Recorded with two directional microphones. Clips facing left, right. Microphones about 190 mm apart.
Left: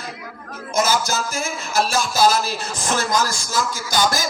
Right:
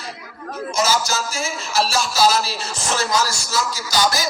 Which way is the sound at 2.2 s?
55° left (ahead or behind).